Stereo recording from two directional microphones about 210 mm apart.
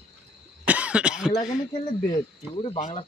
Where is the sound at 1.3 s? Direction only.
15° left (ahead or behind).